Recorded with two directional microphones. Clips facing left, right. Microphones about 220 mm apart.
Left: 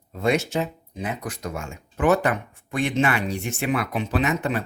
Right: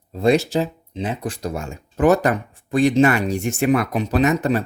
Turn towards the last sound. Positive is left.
turn(degrees=-40)  # may be behind; listen again after turning